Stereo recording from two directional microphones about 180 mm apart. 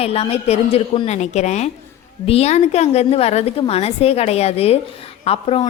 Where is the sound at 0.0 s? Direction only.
35° left (ahead or behind).